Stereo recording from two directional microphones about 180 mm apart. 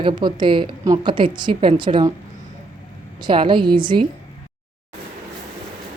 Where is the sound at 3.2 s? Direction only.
25° right (ahead or behind).